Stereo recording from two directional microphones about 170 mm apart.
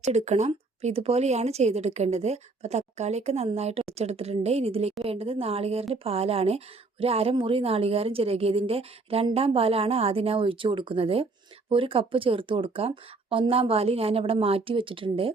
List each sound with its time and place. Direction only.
0.0 s speech: 40° right (ahead or behind)